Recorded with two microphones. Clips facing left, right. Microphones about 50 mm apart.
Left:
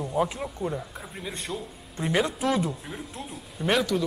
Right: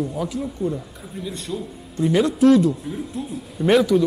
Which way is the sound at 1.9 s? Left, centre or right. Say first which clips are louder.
Right 7 dB; centre.